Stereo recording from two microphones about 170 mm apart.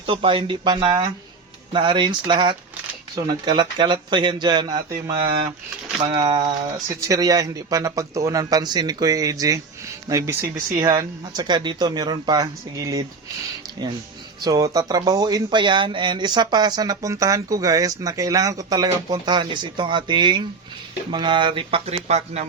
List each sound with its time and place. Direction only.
0.0 s speech: 30° right (ahead or behind)
6.1 s speech: 25° right (ahead or behind)
14.4 s speech: 20° right (ahead or behind); by 22.4 s 40° right (ahead or behind)